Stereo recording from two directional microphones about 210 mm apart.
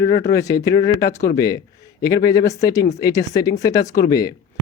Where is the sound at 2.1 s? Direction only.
50° left (ahead or behind).